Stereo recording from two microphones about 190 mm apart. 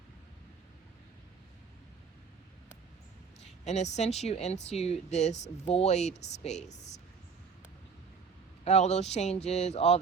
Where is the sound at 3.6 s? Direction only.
35° left (ahead or behind).